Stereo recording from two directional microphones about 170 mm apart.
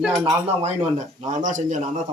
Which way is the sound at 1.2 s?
45° right (ahead or behind).